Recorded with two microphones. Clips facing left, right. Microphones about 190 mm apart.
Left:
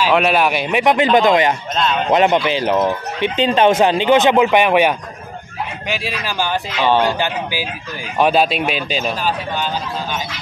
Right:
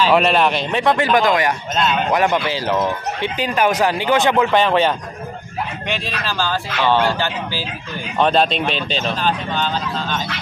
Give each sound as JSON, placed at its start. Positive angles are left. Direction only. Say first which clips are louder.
{"t": 0.1, "sound": "speech", "louder": "even", "side_deg": 5}